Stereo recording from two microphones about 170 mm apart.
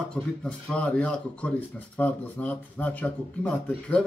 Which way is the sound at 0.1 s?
5° left (ahead or behind).